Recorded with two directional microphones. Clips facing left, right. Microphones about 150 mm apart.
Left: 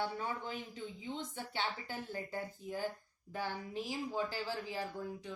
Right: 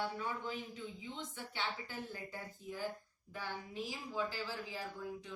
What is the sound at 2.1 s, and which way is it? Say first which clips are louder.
Speech: left 6 dB; 45° left (ahead or behind).